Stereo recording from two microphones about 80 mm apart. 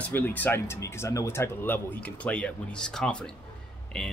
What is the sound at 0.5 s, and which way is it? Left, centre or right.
Speech, left.